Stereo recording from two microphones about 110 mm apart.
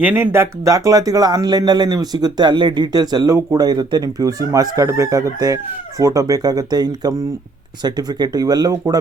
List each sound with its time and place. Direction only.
0.0 s speech: 15° right (ahead or behind)
0.3 s speech: 25° right (ahead or behind)